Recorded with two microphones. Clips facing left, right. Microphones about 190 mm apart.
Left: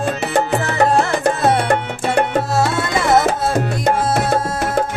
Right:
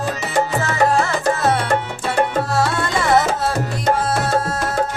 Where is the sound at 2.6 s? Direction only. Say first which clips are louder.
Left 1 dB; 10° left (ahead or behind).